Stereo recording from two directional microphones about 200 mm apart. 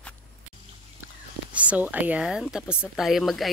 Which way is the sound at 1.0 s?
5° right (ahead or behind).